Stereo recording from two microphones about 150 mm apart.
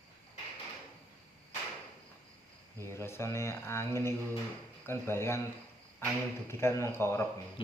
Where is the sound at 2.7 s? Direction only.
15° left (ahead or behind).